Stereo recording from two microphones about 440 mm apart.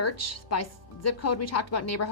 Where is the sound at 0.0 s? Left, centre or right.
Left.